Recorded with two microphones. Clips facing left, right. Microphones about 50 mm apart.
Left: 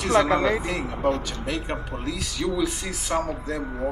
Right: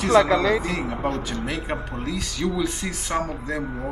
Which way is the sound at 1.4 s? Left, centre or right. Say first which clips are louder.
Right 1 dB; centre.